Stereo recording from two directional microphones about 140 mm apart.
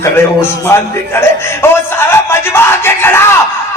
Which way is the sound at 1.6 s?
15° left (ahead or behind).